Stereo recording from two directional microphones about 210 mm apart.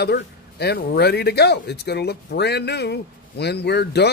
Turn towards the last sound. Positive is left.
turn(degrees=50)  # may be behind; listen again after turning